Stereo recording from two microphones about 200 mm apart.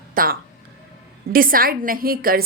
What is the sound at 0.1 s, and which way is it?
A woman's voice, 45° right (ahead or behind).